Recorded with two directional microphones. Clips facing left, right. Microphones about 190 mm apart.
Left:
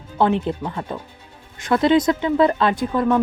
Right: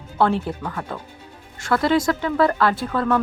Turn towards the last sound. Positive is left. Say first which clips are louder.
# left 2 dB
turn(degrees=15)  # may be behind; listen again after turning